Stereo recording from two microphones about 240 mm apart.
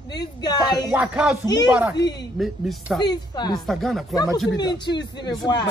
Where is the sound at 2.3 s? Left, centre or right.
Centre.